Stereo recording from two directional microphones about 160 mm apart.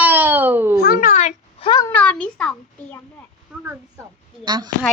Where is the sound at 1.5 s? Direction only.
35° left (ahead or behind).